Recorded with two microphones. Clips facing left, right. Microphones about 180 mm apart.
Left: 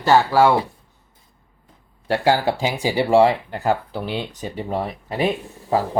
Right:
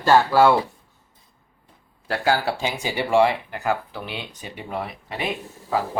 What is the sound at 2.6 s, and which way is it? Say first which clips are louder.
Speech: left 5 dB; 20° left (ahead or behind).